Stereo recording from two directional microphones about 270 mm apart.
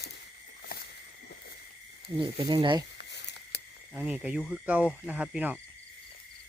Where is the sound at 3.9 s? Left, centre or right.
Centre.